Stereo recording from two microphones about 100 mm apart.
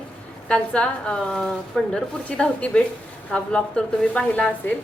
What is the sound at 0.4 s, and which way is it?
A woman's voice, 10° left (ahead or behind).